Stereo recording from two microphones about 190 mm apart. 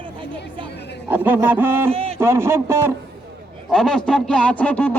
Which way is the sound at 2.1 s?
15° right (ahead or behind).